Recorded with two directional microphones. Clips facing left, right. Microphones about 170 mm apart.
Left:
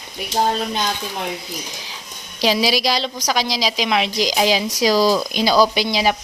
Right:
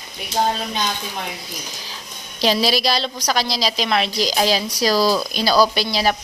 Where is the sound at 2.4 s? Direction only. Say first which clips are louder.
Even; 10° left (ahead or behind).